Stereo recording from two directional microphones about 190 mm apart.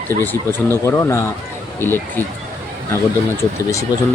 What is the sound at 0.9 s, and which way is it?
Speech, 15° left (ahead or behind).